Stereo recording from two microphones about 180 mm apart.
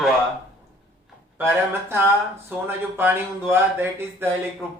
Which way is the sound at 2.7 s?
10° right (ahead or behind).